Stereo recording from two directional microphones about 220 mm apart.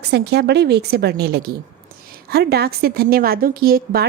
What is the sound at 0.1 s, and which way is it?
A woman's voice, 50° right (ahead or behind).